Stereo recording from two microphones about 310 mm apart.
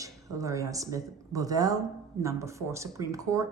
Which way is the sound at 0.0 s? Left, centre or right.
Centre.